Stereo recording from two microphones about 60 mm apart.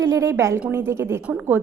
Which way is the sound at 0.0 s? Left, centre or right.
Right.